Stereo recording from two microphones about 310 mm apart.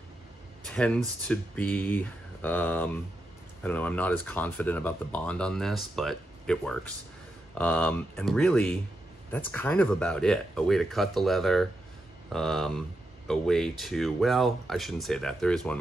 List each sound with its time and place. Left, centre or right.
0.7 s speech: centre